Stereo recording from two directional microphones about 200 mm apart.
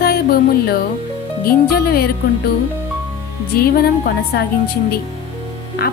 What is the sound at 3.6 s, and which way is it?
Speech, 50° left (ahead or behind).